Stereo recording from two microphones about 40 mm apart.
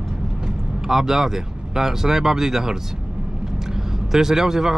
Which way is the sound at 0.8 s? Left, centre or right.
Centre.